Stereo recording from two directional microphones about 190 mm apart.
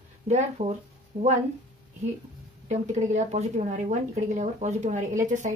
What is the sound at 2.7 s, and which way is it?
Speech, 35° right (ahead or behind).